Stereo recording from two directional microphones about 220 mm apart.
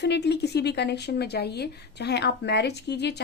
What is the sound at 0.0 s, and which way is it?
Speech, 50° left (ahead or behind).